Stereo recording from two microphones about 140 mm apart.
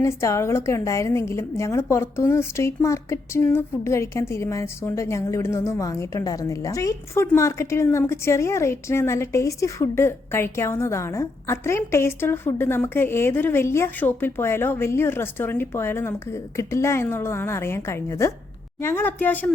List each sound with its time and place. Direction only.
0.0 s a woman's voice: 20° left (ahead or behind)